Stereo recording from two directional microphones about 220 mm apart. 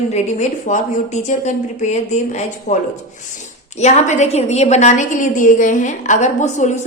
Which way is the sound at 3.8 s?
30° left (ahead or behind).